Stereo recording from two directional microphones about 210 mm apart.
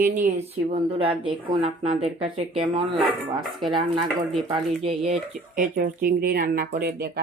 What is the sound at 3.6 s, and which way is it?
Speech, 20° right (ahead or behind).